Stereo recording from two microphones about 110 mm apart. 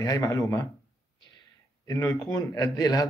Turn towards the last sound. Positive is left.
turn(degrees=35)  # may be behind; listen again after turning